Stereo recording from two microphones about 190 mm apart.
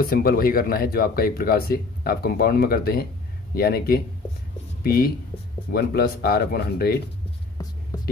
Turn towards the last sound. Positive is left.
turn(degrees=55)  # may be behind; listen again after turning